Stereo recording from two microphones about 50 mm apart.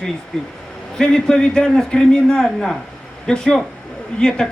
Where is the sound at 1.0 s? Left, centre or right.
Centre.